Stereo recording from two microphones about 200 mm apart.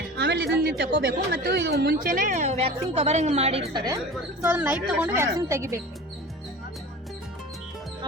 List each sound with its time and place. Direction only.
0.2 s speech: 55° right (ahead or behind); by 3.6 s 30° right (ahead or behind)
3.7 s speech: 20° right (ahead or behind)